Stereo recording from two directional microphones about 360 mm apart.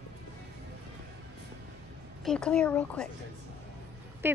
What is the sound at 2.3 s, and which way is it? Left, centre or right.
Speech, centre.